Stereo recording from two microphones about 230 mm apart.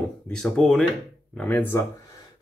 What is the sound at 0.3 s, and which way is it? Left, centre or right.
Speech, centre.